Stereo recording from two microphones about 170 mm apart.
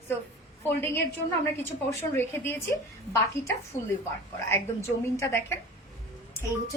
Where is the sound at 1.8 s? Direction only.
15° left (ahead or behind).